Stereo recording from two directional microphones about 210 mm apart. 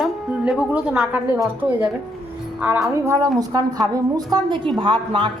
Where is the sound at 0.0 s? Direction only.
5° right (ahead or behind).